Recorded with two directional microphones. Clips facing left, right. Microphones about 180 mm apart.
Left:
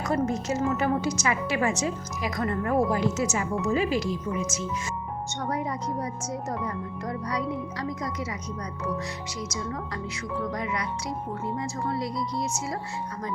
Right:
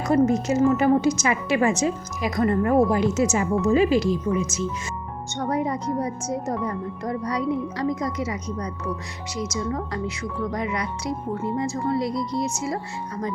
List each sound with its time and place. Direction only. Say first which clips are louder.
0.1 s a woman's voice: right 7 dB; 15° right (ahead or behind)
5.5 s speech: right 6 dB; 25° right (ahead or behind)
10.5 s speech: right 3 dB; 25° right (ahead or behind)